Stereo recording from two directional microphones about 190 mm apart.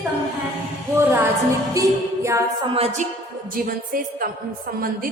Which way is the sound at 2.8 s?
35° right (ahead or behind).